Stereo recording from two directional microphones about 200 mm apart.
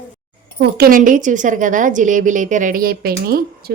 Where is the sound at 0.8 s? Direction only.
40° right (ahead or behind).